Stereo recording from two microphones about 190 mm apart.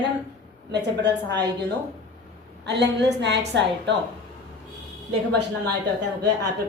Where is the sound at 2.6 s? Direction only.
65° right (ahead or behind).